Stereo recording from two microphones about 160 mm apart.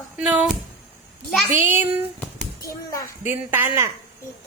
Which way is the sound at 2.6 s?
20° left (ahead or behind).